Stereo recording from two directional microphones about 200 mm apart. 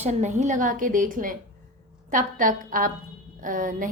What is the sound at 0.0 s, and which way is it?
A woman's voice, 35° right (ahead or behind).